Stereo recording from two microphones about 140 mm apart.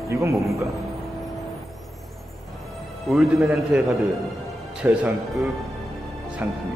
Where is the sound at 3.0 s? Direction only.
5° right (ahead or behind).